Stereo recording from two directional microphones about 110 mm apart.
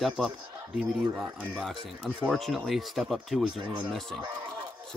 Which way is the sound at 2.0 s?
10° right (ahead or behind).